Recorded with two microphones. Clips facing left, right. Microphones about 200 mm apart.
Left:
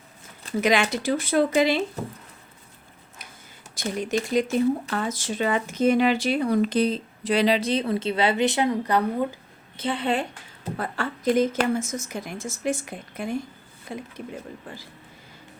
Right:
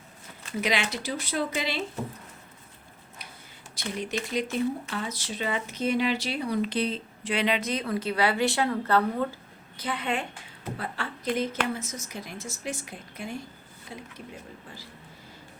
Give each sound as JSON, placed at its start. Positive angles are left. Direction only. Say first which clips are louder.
{"t": 0.6, "sound": "a woman's voice", "louder": "left 7 dB", "side_deg": 45}
{"t": 3.8, "sound": "a sound", "louder": "left 5 dB", "side_deg": 45}
{"t": 4.4, "sound": "speech", "louder": "left 6 dB", "side_deg": 45}
{"t": 9.7, "sound": "a woman's voice", "louder": "left 5 dB", "side_deg": 30}
{"t": 10.8, "sound": "a woman's voice", "louder": "left 7 dB", "side_deg": 45}